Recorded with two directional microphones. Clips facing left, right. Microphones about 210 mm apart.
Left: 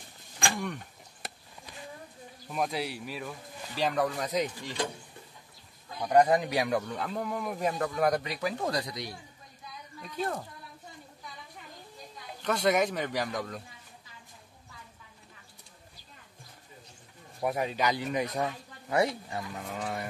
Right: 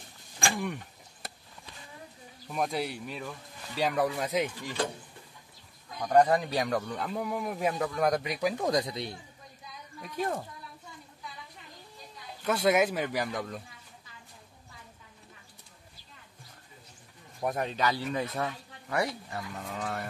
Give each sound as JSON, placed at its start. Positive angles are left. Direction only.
{"t": 0.4, "sound": "speech", "side_deg": -5}
{"t": 2.5, "sound": "a man's voice", "side_deg": 0}
{"t": 5.9, "sound": "a man's voice", "side_deg": 10}
{"t": 8.4, "sound": "speech", "side_deg": -15}
{"t": 10.0, "sound": "speech", "side_deg": -10}
{"t": 12.4, "sound": "a man's voice", "side_deg": -5}
{"t": 17.4, "sound": "speech", "side_deg": 10}
{"t": 19.7, "sound": "speech", "side_deg": 10}